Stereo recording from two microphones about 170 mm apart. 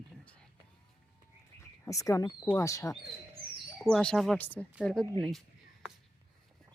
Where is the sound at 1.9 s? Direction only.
20° left (ahead or behind).